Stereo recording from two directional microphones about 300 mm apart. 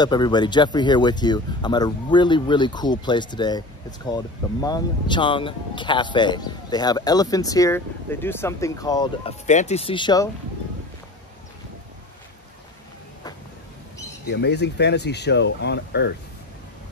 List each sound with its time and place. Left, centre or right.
0.0 s speech: centre
14.3 s speech: left